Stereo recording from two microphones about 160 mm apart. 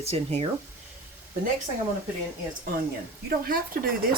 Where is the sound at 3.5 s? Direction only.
65° right (ahead or behind).